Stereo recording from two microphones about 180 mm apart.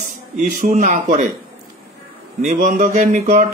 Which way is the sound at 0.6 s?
45° right (ahead or behind).